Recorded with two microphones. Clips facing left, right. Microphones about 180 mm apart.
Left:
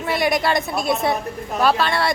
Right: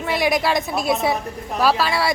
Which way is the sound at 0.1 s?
Centre (ahead or behind).